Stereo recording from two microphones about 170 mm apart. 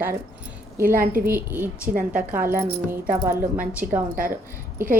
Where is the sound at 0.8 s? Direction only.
60° right (ahead or behind).